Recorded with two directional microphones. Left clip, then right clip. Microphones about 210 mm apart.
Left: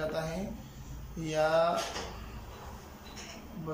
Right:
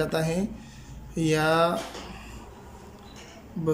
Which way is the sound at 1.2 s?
50° right (ahead or behind).